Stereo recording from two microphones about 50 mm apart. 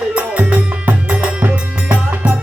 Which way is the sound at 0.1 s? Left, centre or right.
Right.